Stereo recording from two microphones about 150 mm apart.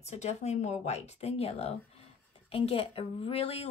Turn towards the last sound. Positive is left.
turn(degrees=40)  # may be behind; listen again after turning